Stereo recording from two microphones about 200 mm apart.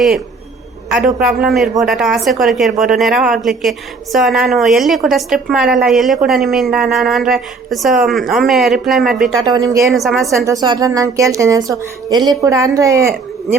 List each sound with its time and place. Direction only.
0.9 s a woman's voice: 5° right (ahead or behind)
9.4 s a woman's voice: 20° right (ahead or behind)
9.8 s a woman's voice: centre (ahead or behind)
10.4 s a woman's voice: 20° right (ahead or behind)